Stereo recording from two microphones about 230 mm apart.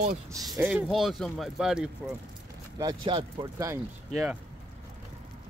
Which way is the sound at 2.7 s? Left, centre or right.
Centre.